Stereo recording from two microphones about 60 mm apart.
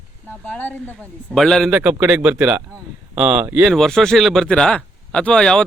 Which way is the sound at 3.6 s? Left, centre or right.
Centre.